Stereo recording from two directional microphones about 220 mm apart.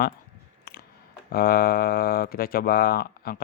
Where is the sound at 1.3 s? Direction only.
45° left (ahead or behind).